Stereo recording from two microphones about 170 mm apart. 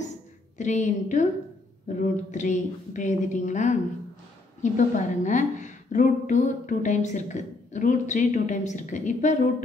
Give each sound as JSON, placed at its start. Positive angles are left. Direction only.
{"t": 0.6, "sound": "a woman's voice", "side_deg": 45}
{"t": 4.7, "sound": "a woman's voice", "side_deg": 45}